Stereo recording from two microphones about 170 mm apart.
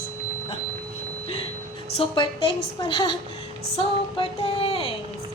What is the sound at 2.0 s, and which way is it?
A woman's voice, 30° left (ahead or behind).